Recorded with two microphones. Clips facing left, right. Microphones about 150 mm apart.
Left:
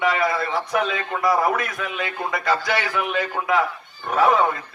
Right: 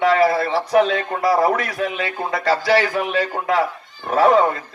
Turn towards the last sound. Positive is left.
turn(degrees=-35)  # may be behind; listen again after turning